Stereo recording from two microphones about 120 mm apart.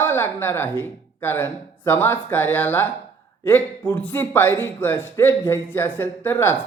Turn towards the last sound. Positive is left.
turn(degrees=20)  # may be behind; listen again after turning